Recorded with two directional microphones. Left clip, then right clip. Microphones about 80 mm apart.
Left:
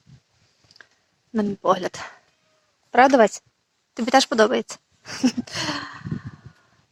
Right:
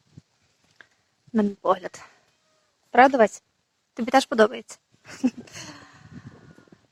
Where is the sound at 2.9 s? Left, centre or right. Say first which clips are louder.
Left 2 dB; left.